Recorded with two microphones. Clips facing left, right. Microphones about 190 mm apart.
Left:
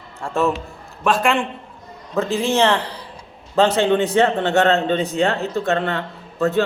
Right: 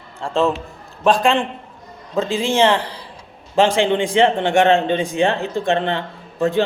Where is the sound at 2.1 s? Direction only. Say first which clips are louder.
Right 1 dB; 15° right (ahead or behind).